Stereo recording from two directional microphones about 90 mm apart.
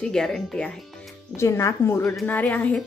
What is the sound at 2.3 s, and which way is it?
Speech, 20° left (ahead or behind).